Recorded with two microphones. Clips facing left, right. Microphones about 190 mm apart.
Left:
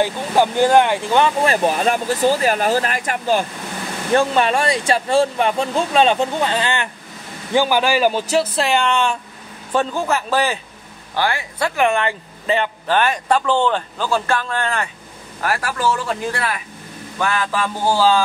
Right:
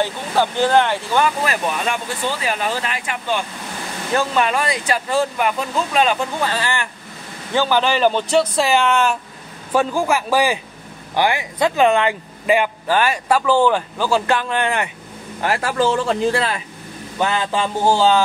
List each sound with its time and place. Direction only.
0.0 s speech: 15° left (ahead or behind); by 18.2 s 25° right (ahead or behind)